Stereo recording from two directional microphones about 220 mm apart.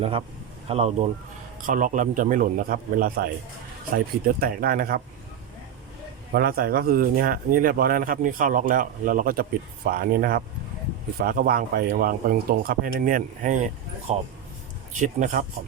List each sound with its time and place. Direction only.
0.7 s speech: 30° right (ahead or behind)
6.3 s speech: 45° right (ahead or behind)